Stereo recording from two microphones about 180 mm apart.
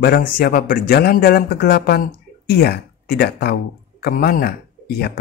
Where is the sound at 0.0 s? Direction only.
55° left (ahead or behind).